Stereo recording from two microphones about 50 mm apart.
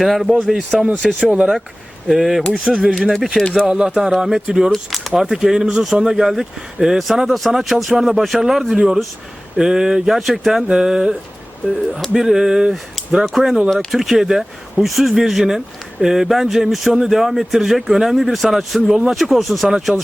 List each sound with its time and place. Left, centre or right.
0.0 s speech: centre
1.2 s speech: centre
2.0 s speech: centre
2.5 s speech: right
2.9 s speech: centre
3.2 s speech: centre
3.7 s speech: centre
4.7 s speech: centre
10.7 s speech: centre
11.9 s speech: centre
13.2 s speech: centre
18.9 s speech: centre
19.1 s speech: centre